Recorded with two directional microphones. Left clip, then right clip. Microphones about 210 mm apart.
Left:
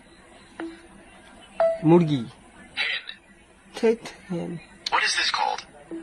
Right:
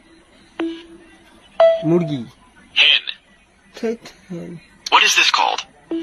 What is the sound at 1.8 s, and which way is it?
Speech, centre (ahead or behind).